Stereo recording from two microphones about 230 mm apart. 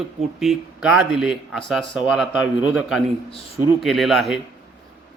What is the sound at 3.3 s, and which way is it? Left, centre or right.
Speech, left.